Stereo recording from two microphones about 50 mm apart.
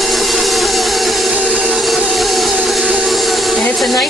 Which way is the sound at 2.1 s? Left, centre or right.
Centre.